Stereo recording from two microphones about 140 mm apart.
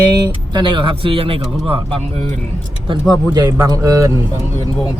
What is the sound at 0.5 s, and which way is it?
A man's voice, 35° right (ahead or behind).